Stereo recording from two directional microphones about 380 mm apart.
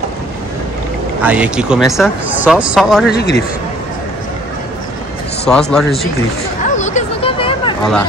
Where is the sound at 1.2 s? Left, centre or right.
Centre.